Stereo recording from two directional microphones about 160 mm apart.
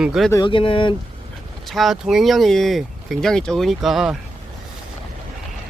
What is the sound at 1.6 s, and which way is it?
Speech, centre (ahead or behind).